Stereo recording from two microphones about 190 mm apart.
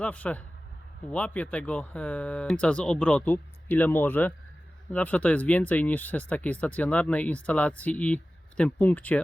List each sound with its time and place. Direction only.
0.0 s speech: 5° left (ahead or behind)